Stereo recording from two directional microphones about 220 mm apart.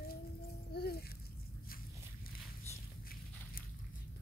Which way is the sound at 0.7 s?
45° left (ahead or behind).